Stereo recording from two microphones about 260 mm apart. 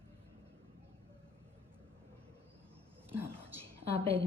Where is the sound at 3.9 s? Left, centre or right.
Right.